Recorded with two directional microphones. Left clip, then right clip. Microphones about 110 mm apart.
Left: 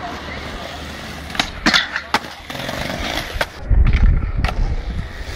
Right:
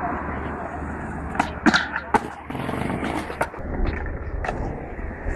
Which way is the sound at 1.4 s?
35° left (ahead or behind).